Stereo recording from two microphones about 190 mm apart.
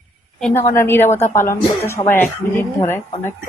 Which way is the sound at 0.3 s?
5° left (ahead or behind).